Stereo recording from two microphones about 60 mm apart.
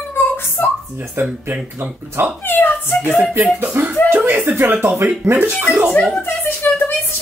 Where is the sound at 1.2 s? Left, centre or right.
Right.